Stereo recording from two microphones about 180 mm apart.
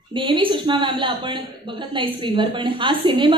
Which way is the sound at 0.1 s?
25° right (ahead or behind).